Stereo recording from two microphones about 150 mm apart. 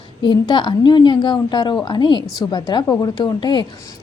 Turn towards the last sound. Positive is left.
turn(degrees=30)  # may be behind; listen again after turning